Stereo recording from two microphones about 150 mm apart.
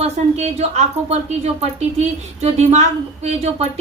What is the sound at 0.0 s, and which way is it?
Speech, 45° right (ahead or behind).